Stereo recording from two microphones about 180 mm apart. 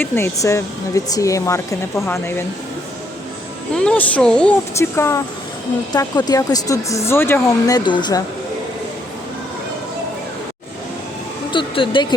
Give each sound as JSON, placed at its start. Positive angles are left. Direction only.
{"t": 0.0, "sound": "speech", "side_deg": 15}
{"t": 3.8, "sound": "speech", "side_deg": 5}
{"t": 11.5, "sound": "a sound", "side_deg": 30}